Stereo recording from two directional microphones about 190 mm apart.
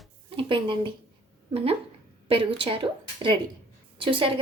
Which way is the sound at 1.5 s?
30° right (ahead or behind).